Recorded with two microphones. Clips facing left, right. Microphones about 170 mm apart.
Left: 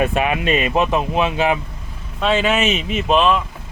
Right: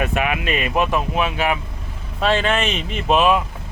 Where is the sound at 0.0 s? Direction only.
30° left (ahead or behind).